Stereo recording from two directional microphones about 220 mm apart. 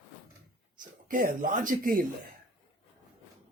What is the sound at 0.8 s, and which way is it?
Speech, 40° right (ahead or behind).